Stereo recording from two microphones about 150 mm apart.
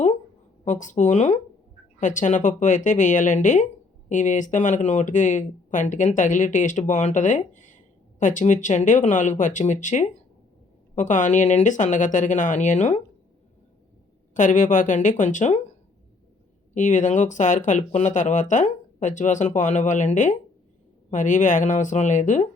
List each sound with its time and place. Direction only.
0.6 s speech: 55° left (ahead or behind)
14.3 s speech: 55° left (ahead or behind)
16.7 s speech: 55° left (ahead or behind)